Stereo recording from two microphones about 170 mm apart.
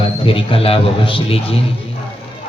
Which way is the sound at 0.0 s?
35° left (ahead or behind).